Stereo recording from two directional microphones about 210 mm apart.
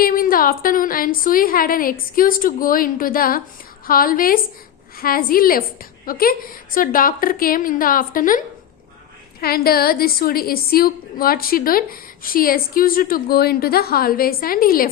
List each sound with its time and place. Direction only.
0.0 s a woman's voice: 45° left (ahead or behind)
9.4 s a woman's voice: 45° left (ahead or behind)